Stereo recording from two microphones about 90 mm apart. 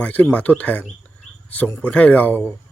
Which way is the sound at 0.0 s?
15° left (ahead or behind).